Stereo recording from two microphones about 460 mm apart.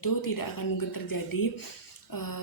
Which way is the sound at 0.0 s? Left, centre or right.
Left.